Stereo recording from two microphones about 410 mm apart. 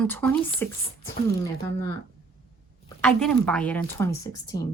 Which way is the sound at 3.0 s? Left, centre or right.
Centre.